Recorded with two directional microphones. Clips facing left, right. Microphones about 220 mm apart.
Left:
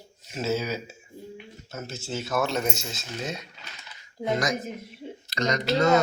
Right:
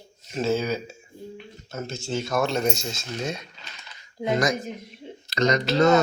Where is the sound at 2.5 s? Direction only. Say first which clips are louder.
Right 3 dB; 35° right (ahead or behind).